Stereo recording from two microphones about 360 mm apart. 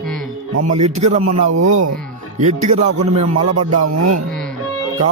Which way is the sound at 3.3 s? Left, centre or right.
Right.